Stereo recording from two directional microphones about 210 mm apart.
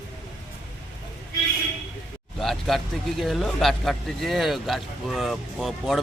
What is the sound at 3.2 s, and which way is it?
Speech, centre (ahead or behind).